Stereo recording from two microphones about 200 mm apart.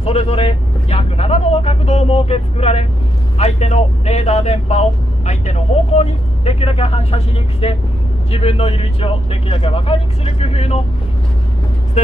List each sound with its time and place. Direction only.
0.0 s speech: 30° left (ahead or behind)